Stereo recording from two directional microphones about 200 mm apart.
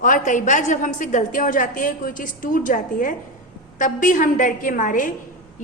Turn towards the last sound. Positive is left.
turn(degrees=40)  # may be behind; listen again after turning